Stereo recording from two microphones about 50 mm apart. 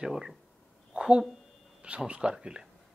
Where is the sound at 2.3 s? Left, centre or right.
Centre.